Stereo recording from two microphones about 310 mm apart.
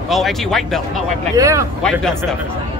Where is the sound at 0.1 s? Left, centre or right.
Centre.